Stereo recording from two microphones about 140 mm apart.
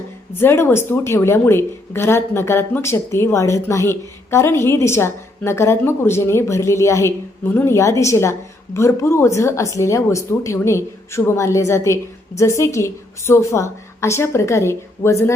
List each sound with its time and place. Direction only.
0.3 s a woman's voice: 15° left (ahead or behind)